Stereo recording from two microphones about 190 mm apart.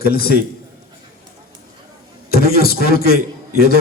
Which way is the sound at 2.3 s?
55° left (ahead or behind).